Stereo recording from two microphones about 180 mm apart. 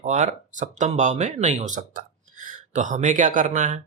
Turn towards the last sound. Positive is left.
turn(degrees=-45)  # may be behind; listen again after turning